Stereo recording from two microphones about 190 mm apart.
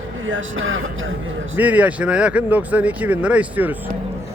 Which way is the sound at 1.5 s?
10° right (ahead or behind).